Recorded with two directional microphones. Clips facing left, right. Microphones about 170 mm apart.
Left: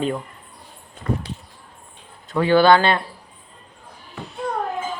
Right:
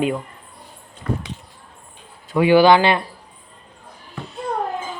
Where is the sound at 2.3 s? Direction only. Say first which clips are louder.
Right 2 dB; 10° right (ahead or behind).